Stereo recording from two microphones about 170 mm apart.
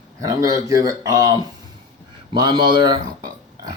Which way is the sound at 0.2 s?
20° right (ahead or behind).